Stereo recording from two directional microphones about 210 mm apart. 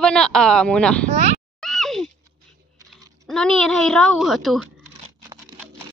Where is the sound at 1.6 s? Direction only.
Centre (ahead or behind).